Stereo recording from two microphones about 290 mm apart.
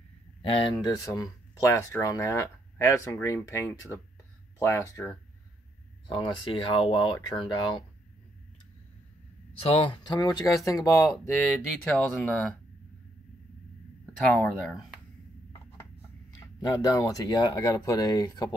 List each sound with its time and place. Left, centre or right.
0.8 s speech: centre
9.6 s speech: centre
14.2 s speech: centre
16.5 s speech: centre